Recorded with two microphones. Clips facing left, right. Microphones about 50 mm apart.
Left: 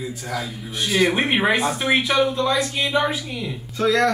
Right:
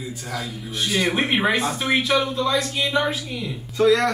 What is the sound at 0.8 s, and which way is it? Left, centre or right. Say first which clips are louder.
Speech: left 3 dB; centre.